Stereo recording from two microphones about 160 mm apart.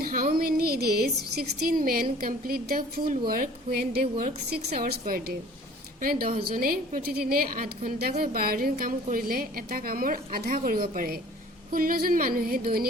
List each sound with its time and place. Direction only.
0.0 s music: 65° right (ahead or behind)
0.3 s a woman's voice: 70° right (ahead or behind)